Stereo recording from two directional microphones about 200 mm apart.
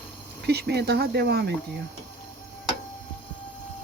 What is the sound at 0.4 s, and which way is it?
Speech, 55° right (ahead or behind).